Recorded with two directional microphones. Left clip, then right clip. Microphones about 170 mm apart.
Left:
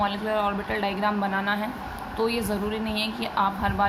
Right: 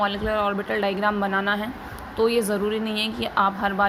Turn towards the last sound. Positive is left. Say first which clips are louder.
# right 3 dB
turn(degrees=-25)  # may be behind; listen again after turning